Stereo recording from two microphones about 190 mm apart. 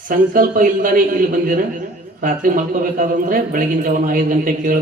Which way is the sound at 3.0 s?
45° right (ahead or behind).